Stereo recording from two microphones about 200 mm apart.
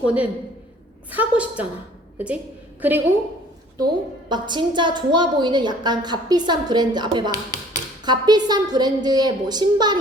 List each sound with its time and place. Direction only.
0.0 s a woman's voice: 5° right (ahead or behind)
3.8 s a woman's voice: 20° right (ahead or behind)